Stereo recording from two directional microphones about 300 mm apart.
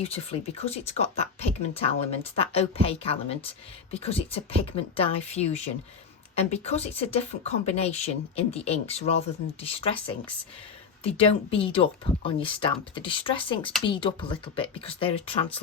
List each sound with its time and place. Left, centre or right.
0.0 s speech: centre
11.0 s speech: centre